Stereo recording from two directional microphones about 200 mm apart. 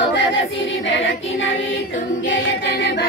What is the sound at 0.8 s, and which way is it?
Choir, 70° left (ahead or behind).